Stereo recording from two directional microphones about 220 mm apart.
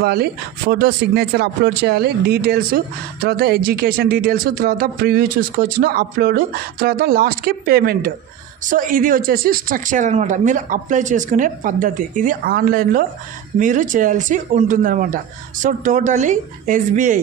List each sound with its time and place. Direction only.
0.0 s speech: 45° right (ahead or behind)